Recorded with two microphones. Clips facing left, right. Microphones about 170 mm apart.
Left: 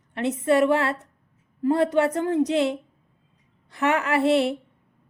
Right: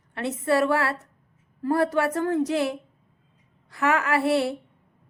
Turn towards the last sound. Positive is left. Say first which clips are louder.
# left 2 dB
turn(degrees=20)  # may be behind; listen again after turning